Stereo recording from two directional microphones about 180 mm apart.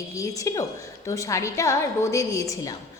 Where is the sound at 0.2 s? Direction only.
20° left (ahead or behind).